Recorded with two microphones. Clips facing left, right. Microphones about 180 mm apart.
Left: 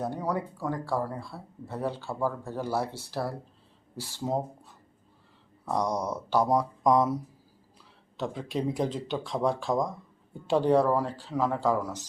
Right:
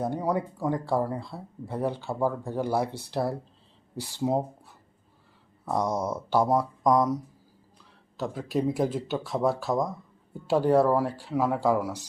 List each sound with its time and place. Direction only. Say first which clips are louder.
0.0 s speech: right 3 dB; 10° right (ahead or behind)
5.6 s speech: right 1 dB; 5° right (ahead or behind)